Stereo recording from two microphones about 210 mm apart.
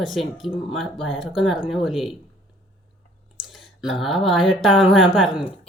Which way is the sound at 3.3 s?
Centre (ahead or behind).